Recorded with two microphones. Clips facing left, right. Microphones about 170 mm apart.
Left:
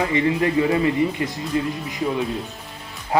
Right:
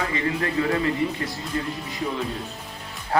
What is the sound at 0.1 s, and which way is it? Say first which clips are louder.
Speech: left 6 dB; 20° left (ahead or behind).